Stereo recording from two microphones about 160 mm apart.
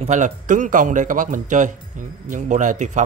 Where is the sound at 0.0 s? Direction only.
50° right (ahead or behind).